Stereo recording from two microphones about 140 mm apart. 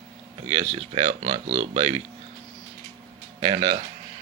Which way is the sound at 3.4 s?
50° right (ahead or behind).